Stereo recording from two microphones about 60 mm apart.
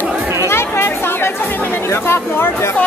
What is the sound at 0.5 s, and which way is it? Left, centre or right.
Chatter, left.